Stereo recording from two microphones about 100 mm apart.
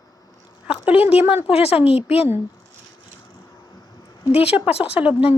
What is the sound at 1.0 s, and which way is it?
Speech, 80° left.